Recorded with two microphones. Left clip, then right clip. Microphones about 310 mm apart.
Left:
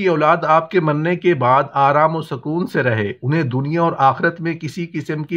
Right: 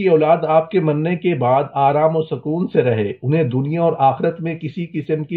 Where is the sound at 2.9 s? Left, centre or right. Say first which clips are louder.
Right 1 dB; left.